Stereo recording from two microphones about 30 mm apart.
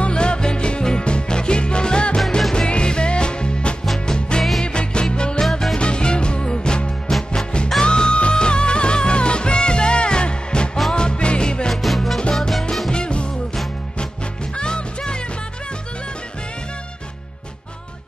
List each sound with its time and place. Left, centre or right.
0.0 s music: left
4.4 s music: centre
4.6 s music: left
5.4 s music: centre
5.8 s music: left
11.7 s music: centre
12.9 s music: left
14.5 s music: left